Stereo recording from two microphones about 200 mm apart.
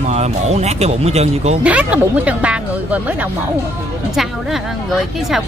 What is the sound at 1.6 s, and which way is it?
Speech, 5° right (ahead or behind).